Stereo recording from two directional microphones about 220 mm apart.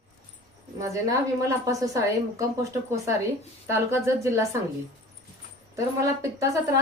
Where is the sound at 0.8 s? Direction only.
15° right (ahead or behind).